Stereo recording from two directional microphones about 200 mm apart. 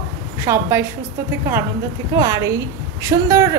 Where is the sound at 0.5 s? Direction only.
10° right (ahead or behind).